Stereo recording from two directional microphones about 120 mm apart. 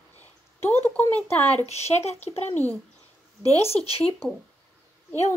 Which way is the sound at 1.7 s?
65° left (ahead or behind).